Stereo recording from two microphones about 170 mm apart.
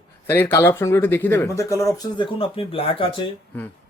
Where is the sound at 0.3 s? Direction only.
15° left (ahead or behind).